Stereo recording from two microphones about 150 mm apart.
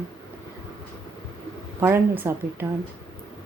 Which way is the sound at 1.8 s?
15° right (ahead or behind).